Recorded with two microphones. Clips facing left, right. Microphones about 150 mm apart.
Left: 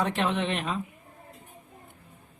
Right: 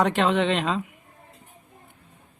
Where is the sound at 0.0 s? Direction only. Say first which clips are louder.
Right 6 dB; 90° right.